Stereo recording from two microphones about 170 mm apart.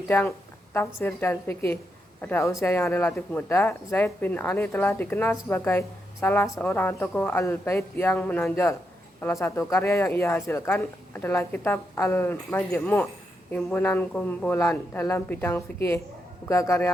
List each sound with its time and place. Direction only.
0.1 s speech: 10° left (ahead or behind)